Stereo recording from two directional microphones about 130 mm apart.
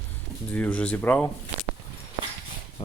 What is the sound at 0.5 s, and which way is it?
Speech, 10° left (ahead or behind).